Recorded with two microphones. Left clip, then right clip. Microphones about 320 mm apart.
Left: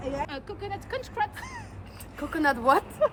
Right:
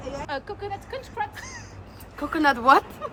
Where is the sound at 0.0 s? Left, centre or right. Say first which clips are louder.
Left 3 dB; left.